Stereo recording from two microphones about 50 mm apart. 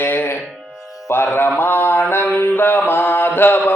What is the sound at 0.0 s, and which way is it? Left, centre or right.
Music, left.